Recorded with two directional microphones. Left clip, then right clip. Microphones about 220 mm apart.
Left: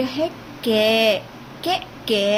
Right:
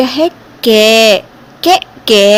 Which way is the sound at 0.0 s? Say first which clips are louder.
Right 12 dB; 45° right (ahead or behind).